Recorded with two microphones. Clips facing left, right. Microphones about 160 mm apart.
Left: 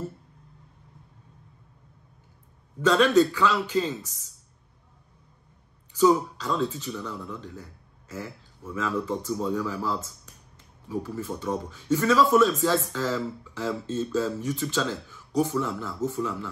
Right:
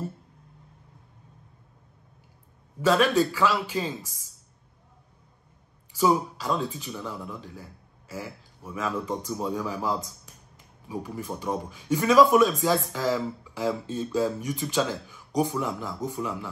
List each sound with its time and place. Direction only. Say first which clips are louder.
2.8 s a man's voice: left 2 dB; 10° right (ahead or behind)
5.9 s a man's voice: left 3 dB; 10° right (ahead or behind)